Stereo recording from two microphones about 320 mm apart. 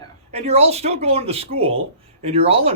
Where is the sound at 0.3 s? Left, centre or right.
Centre.